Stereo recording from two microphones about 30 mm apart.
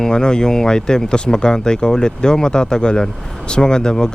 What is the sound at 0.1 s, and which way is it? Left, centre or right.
Speech, left.